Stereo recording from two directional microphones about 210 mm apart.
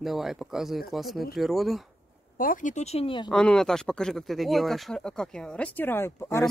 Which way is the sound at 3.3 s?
5° left (ahead or behind).